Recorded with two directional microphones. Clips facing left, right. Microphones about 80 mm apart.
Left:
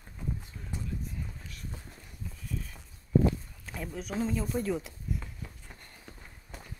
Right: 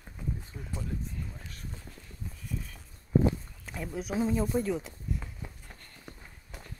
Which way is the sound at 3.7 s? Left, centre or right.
Centre.